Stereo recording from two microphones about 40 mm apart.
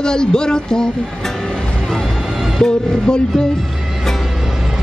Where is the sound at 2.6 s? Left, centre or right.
Centre.